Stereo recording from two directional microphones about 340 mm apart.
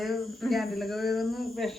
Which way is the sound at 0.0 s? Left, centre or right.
Centre.